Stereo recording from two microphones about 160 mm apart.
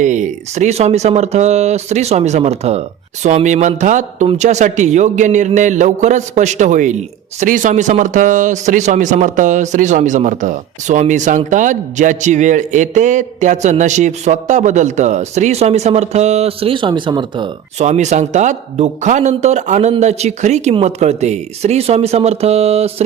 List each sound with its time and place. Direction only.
0.0 s a man's voice: 50° right (ahead or behind); by 17.5 s 30° right (ahead or behind)
17.7 s a man's voice: 45° right (ahead or behind)